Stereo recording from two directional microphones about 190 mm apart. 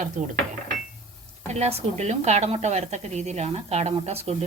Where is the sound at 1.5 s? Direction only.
35° right (ahead or behind).